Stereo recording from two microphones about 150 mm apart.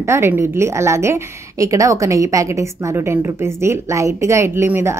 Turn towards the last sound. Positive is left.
turn(degrees=-15)  # may be behind; listen again after turning